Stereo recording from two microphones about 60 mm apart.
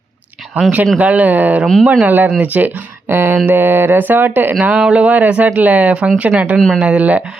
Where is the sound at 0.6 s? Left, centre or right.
Right.